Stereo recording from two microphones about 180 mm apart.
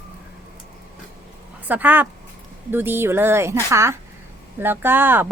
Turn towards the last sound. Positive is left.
turn(degrees=-10)  # may be behind; listen again after turning